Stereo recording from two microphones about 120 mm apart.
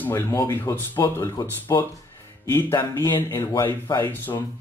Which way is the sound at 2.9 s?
20° left (ahead or behind).